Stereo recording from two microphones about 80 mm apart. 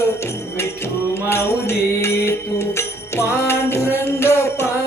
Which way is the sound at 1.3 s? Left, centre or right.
Left.